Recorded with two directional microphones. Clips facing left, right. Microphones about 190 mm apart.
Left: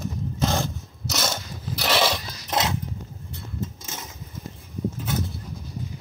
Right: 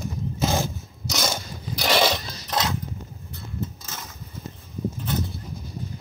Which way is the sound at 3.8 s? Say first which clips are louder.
Left 1 dB; 20° left (ahead or behind).